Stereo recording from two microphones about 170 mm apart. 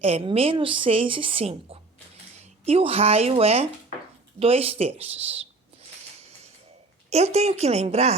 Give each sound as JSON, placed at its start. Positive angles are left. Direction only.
{"t": 0.0, "sound": "a woman's voice", "side_deg": -35}
{"t": 7.1, "sound": "a woman's voice", "side_deg": -40}